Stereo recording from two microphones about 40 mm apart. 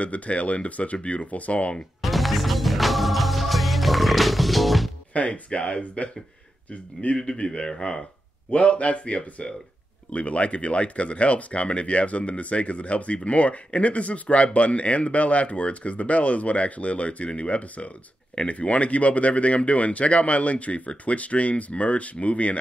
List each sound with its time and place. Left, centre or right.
0.0 s speech: left
2.0 s music: centre
5.1 s speech: left
7.2 s speech: centre
8.5 s speech: left